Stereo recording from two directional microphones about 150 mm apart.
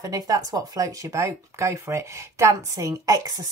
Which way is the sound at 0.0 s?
25° right (ahead or behind).